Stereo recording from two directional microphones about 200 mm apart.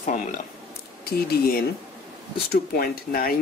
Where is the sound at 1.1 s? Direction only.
50° left (ahead or behind).